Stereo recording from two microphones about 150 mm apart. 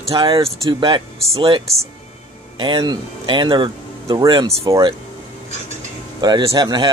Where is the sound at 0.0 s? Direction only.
35° right (ahead or behind).